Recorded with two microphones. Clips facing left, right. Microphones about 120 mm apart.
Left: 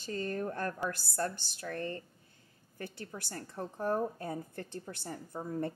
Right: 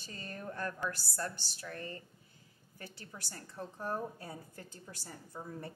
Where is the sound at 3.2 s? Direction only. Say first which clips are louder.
Left 4 dB; 55° left (ahead or behind).